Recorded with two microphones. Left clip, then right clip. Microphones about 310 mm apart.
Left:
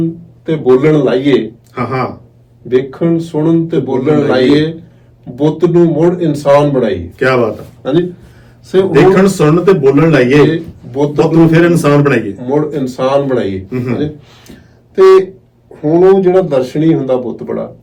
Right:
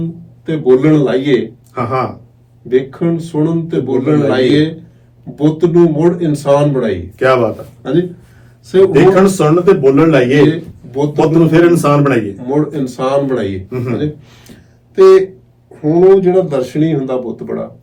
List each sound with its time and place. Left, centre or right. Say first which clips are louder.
0.4 s a man's voice: left 1 dB; centre
1.7 s a man's voice: right 1 dB; centre
2.6 s a man's voice: left 2 dB; centre
7.2 s a man's voice: right 1 dB; centre
7.8 s a man's voice: left 2 dB; centre
8.9 s a man's voice: left 1 dB; centre
10.5 s speech: left 3 dB; centre
11.3 s a man's voice: even; centre
12.5 s a man's voice: left 4 dB; centre
13.7 s a man's voice: left 2 dB; centre
13.9 s speech: left 1 dB; centre
15.7 s a man's voice: left 1 dB; centre